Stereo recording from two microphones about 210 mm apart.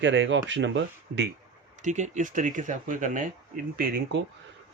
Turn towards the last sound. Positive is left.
turn(degrees=-45)  # may be behind; listen again after turning